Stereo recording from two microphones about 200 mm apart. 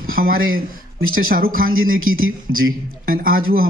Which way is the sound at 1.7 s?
90° right.